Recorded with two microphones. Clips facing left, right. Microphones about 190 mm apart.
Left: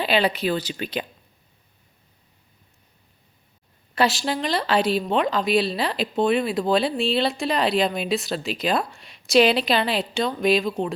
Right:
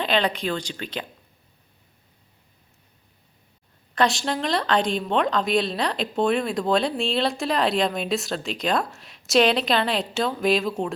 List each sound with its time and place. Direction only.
0.0 s speech: 5° left (ahead or behind)
3.9 s speech: 5° left (ahead or behind)